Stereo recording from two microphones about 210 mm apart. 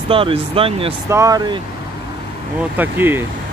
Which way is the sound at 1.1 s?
15° right (ahead or behind).